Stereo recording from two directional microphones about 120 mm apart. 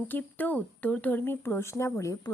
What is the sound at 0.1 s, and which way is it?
Speech, 15° left (ahead or behind).